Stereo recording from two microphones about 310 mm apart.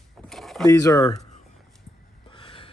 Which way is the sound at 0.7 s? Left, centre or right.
Centre.